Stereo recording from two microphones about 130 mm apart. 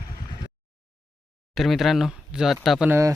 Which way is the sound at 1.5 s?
Centre (ahead or behind).